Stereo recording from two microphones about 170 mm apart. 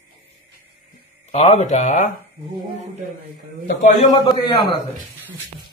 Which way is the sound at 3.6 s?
45° left (ahead or behind).